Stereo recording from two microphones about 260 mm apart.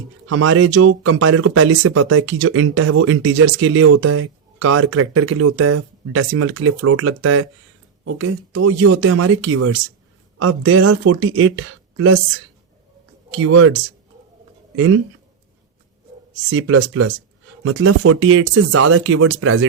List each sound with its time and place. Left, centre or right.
0.3 s speech: right
13.3 s speech: right
14.8 s speech: right
16.3 s speech: right